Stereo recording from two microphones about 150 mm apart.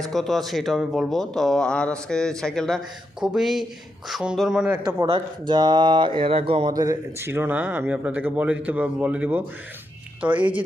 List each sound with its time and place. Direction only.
0.0 s speech: centre (ahead or behind)
4.7 s a man's voice: 20° right (ahead or behind)
5.1 s speech: 30° right (ahead or behind)
6.7 s speech: 20° right (ahead or behind)